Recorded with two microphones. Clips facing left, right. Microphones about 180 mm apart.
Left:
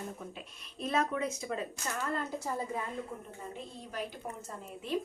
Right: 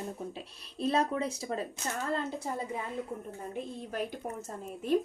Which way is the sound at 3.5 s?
50° right (ahead or behind).